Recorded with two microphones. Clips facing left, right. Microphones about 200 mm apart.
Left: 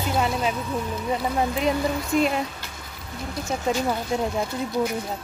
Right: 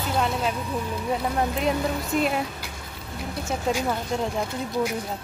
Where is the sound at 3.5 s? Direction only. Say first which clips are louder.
Left 1 dB; 10° right (ahead or behind).